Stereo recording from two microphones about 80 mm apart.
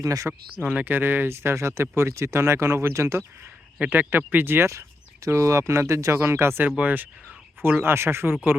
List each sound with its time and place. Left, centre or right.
0.0 s speech: right
0.6 s speech: centre; by 3.2 s right
3.8 s speech: right
6.7 s speech: centre